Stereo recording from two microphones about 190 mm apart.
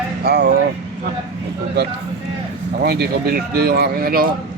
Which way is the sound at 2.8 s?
55° right (ahead or behind).